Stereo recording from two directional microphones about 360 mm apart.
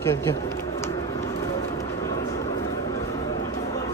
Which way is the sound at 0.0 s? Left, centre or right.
Centre.